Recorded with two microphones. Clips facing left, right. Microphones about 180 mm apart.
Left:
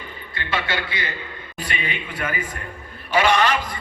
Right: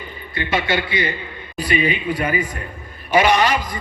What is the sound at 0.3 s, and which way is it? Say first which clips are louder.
Speech: right 5 dB; 15° right (ahead or behind).